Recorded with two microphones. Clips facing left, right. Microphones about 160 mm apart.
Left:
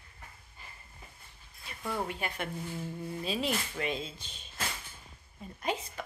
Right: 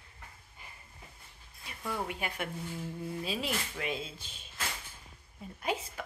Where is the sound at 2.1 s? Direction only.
10° right (ahead or behind).